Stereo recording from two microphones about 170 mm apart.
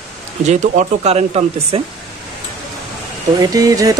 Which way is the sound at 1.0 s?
35° right (ahead or behind).